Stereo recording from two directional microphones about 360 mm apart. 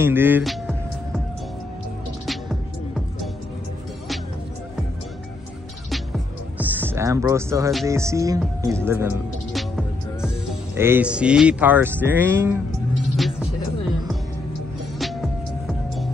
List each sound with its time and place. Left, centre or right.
0.0 s music: centre
5.9 s music: centre